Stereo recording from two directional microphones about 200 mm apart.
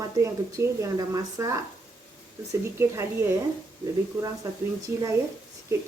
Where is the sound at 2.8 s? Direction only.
15° right (ahead or behind).